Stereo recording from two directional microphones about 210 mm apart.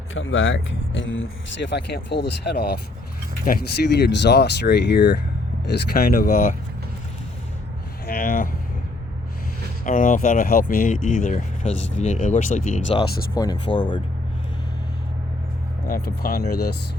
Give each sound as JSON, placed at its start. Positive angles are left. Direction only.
{"t": 0.1, "sound": "speech", "side_deg": 70}
{"t": 8.0, "sound": "speech", "side_deg": 45}
{"t": 9.8, "sound": "speech", "side_deg": 40}
{"t": 13.3, "sound": "speech", "side_deg": 20}
{"t": 15.9, "sound": "speech", "side_deg": 45}